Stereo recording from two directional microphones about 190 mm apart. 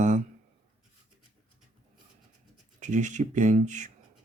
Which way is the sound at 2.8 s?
40° right (ahead or behind).